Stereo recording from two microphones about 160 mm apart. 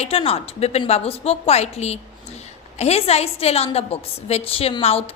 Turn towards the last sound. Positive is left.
turn(degrees=40)  # may be behind; listen again after turning